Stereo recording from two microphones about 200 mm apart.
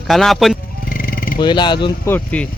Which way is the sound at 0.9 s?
45° left (ahead or behind).